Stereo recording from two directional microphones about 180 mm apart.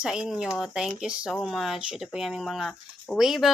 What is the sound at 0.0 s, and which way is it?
Speech, 5° right (ahead or behind).